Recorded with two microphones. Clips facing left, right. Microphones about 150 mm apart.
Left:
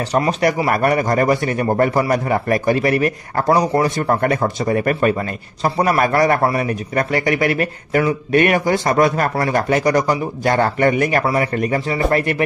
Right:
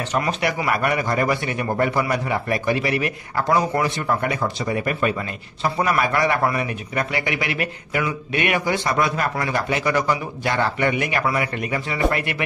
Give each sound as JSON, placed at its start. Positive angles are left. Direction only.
{"t": 0.1, "sound": "a man's voice", "side_deg": 35}